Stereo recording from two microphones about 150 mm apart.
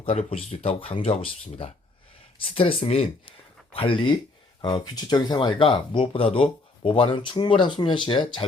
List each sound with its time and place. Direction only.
0.0 s speech: 40° left (ahead or behind)